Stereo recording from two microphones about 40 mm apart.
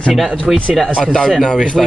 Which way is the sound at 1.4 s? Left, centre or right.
Left.